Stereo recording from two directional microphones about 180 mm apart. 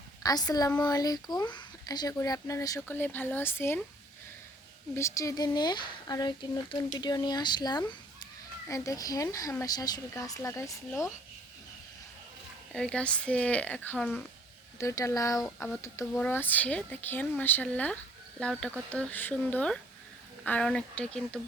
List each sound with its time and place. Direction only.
0.2 s speech: 20° left (ahead or behind)
4.9 s speech: 15° left (ahead or behind)
12.7 s speech: 5° left (ahead or behind)